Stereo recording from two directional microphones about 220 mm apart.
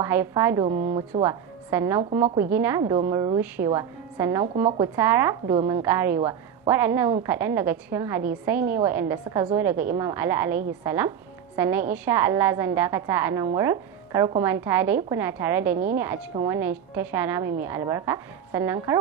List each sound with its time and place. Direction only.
0.0 s a woman's voice: 10° right (ahead or behind)